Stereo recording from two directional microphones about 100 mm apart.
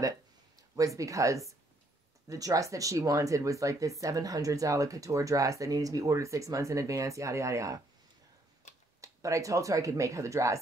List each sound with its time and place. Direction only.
0.7 s speech: 35° right (ahead or behind)
9.0 s speech: 30° right (ahead or behind)